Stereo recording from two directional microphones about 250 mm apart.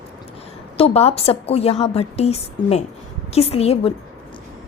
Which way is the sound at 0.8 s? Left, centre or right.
Left.